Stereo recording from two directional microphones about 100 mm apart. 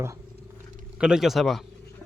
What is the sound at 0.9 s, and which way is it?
Speech, 10° right (ahead or behind).